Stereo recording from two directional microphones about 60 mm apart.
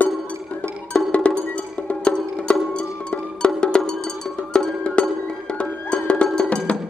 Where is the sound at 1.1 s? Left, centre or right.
Left.